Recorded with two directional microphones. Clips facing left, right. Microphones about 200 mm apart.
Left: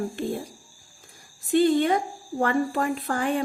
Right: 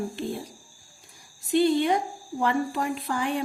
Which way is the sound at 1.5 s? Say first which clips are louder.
Left 2 dB; 50° left (ahead or behind).